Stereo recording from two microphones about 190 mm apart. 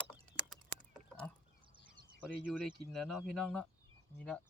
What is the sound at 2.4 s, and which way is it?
Speech, 5° left (ahead or behind).